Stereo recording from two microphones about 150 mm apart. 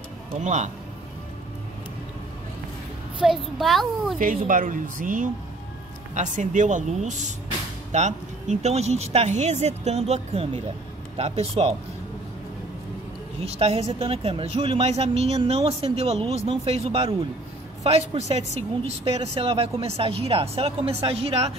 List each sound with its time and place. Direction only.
0.4 s a woman's voice: 55° right (ahead or behind)
3.2 s a child's voice: 5° right (ahead or behind)
4.2 s a woman's voice: 65° right (ahead or behind); by 11.7 s 45° right (ahead or behind)
13.4 s a woman's voice: 40° right (ahead or behind)